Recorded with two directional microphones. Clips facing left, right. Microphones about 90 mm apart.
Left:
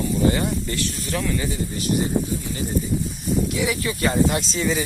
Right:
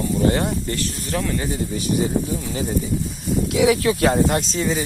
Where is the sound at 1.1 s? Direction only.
30° right (ahead or behind).